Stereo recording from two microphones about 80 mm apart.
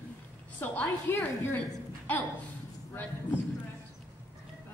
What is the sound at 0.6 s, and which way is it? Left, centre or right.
Speech, left.